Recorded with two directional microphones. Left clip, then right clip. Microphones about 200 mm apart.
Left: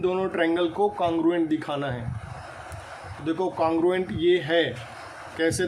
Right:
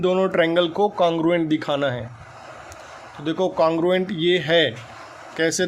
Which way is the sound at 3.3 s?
45° right (ahead or behind).